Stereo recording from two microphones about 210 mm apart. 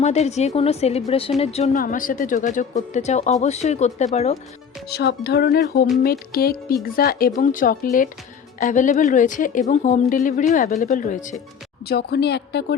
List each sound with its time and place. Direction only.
0.0 s a woman's voice: 30° left (ahead or behind)
1.8 s a woman's voice: 40° left (ahead or behind)
4.9 s a woman's voice: 50° left (ahead or behind)
11.9 s speech: 50° left (ahead or behind)